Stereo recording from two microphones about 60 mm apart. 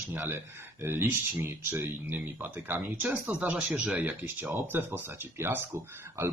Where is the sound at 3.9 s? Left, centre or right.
Right.